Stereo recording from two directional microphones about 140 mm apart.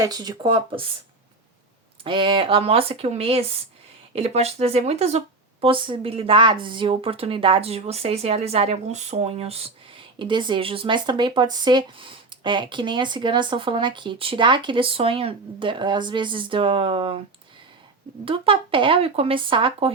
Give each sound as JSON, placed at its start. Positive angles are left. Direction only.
{"t": 0.0, "sound": "speech", "side_deg": -30}
{"t": 2.0, "sound": "speech", "side_deg": -35}
{"t": 18.3, "sound": "speech", "side_deg": -40}